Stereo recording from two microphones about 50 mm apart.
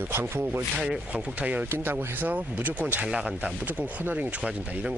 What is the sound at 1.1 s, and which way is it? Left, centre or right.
Speech, right.